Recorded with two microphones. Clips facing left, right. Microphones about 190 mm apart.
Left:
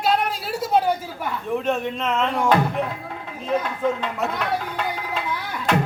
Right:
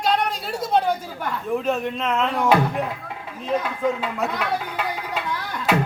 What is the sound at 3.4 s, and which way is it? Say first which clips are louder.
Speech: even; centre (ahead or behind).